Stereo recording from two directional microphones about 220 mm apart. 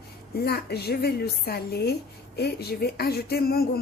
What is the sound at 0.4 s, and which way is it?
A woman's voice, 45° left (ahead or behind).